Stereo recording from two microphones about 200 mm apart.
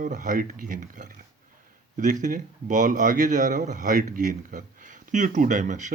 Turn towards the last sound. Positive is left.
turn(degrees=-40)  # may be behind; listen again after turning